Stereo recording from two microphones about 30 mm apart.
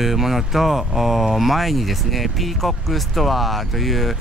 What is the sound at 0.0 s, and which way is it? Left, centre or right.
Speech, centre.